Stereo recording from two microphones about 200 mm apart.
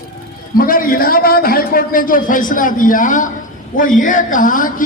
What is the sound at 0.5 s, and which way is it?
A man's voice, 45° left (ahead or behind).